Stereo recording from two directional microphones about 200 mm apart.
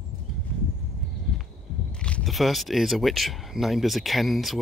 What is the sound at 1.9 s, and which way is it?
Speech, 5° left (ahead or behind).